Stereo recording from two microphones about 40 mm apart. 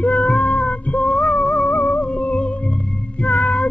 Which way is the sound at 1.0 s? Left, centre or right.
Centre.